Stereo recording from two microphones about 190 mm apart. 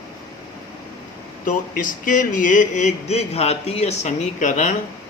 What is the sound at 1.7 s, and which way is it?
Speech, 45° left (ahead or behind).